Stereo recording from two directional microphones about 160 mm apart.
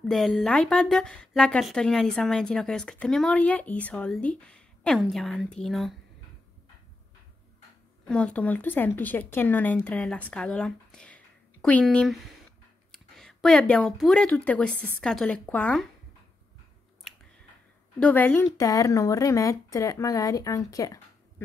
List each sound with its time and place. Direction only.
0.0 s a woman's voice: centre (ahead or behind)
8.0 s a woman's voice: 5° left (ahead or behind)
17.9 s speech: 10° left (ahead or behind)